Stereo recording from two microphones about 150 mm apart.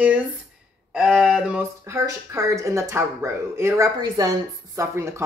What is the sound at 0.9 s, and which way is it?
Speech, 5° right (ahead or behind).